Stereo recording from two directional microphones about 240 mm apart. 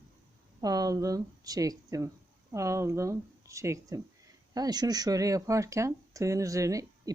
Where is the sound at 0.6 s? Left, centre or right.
Centre.